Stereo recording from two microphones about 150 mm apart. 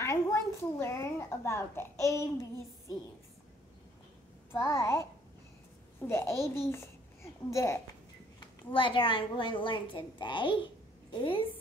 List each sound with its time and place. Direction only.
0.0 s a child's voice: 20° left (ahead or behind)
4.5 s a child's voice: 20° left (ahead or behind)
8.4 s a woman's voice: 35° left (ahead or behind)